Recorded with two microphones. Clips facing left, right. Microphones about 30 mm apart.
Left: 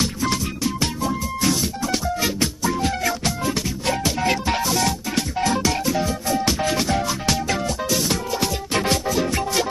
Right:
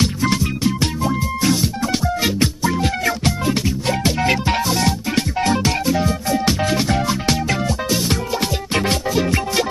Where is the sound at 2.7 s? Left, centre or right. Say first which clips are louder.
Right 2 dB; right.